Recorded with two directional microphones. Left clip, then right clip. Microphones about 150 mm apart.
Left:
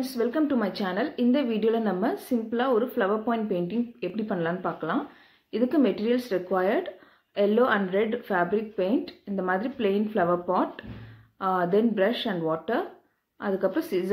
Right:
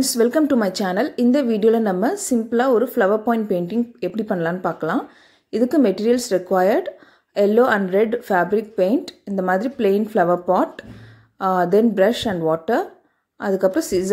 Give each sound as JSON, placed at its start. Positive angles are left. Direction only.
{"t": 0.0, "sound": "a woman's voice", "side_deg": -85}